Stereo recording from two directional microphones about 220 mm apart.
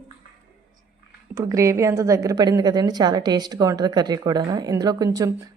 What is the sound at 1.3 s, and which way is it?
A woman's voice, 15° right (ahead or behind).